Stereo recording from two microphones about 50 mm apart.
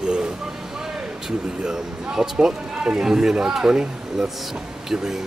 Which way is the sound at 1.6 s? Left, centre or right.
Centre.